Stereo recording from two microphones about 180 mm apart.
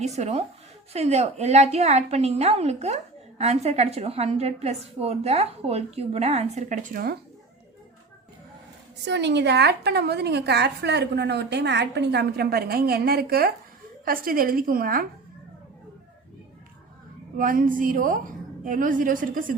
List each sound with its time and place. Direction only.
0.0 s a woman's voice: 40° right (ahead or behind); by 7.2 s 55° right (ahead or behind)
9.0 s a woman's voice: 75° right (ahead or behind); by 15.0 s 55° right (ahead or behind)
17.3 s a woman's voice: 50° right (ahead or behind)